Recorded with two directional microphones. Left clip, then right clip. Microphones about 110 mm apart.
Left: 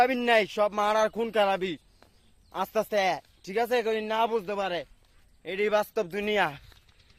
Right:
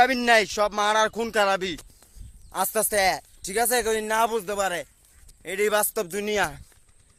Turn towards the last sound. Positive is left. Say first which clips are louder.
# right 1 dB
turn(degrees=-30)  # may be behind; listen again after turning